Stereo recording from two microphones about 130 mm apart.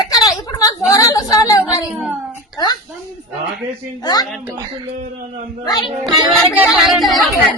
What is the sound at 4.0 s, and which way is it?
Speech, 30° left (ahead or behind).